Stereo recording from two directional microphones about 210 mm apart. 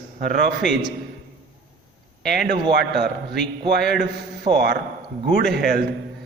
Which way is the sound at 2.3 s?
45° right (ahead or behind).